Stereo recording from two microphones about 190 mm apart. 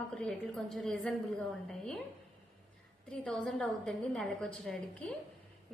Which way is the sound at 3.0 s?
Centre (ahead or behind).